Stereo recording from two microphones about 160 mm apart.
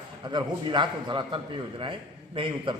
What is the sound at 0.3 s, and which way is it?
A man's voice, 30° right (ahead or behind).